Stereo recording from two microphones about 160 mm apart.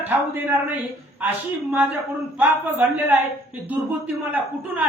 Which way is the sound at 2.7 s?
10° right (ahead or behind).